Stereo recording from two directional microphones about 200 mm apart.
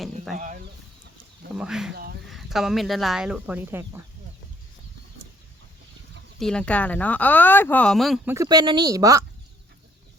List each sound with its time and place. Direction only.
0.3 s speech: 40° right (ahead or behind)
1.5 s speech: 5° right (ahead or behind)
1.9 s speech: 50° right (ahead or behind)
2.2 s speech: centre (ahead or behind)
6.4 s speech: 5° left (ahead or behind)
8.3 s speech: 15° right (ahead or behind)